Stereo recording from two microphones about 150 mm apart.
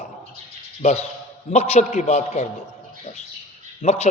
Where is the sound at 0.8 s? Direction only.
50° left (ahead or behind).